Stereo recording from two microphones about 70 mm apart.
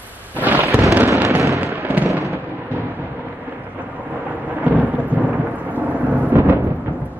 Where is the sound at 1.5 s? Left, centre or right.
Right.